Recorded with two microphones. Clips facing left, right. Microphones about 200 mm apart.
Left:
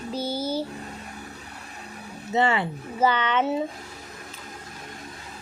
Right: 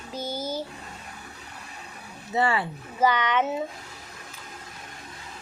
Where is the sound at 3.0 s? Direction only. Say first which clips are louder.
Even; 15° right (ahead or behind).